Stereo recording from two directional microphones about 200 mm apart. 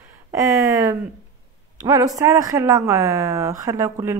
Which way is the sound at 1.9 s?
15° right (ahead or behind).